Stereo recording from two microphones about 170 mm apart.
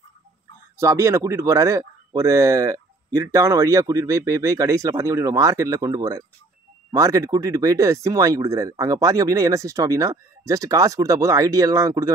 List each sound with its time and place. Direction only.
0.7 s speech: 15° right (ahead or behind)